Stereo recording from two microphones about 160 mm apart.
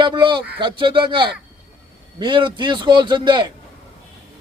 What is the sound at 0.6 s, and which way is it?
A man's voice, 30° right (ahead or behind).